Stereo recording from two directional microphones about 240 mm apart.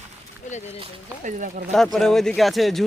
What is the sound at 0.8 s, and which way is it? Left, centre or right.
Speech, right.